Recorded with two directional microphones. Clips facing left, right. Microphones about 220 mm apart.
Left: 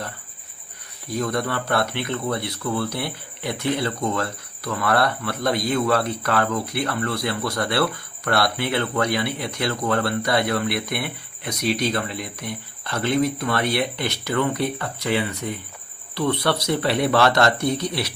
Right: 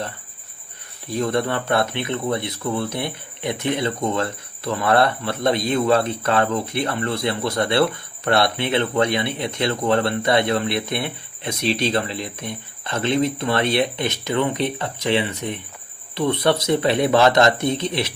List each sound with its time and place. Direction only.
1.0 s speech: 25° right (ahead or behind)